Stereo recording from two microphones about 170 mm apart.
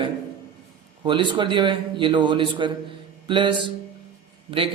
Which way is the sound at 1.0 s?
30° right (ahead or behind).